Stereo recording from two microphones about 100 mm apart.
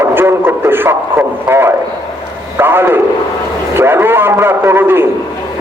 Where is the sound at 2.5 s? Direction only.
20° right (ahead or behind).